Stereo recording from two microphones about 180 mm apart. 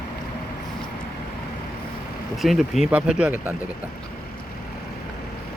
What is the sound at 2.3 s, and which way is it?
Speech, centre (ahead or behind).